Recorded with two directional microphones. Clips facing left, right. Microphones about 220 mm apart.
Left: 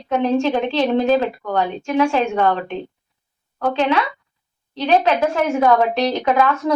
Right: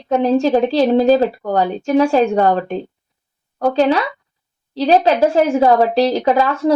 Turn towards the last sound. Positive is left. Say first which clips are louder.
# right 2 dB
turn(degrees=-30)  # may be behind; listen again after turning